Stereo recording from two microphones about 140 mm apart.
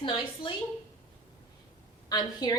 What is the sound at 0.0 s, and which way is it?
Speech, 35° left (ahead or behind).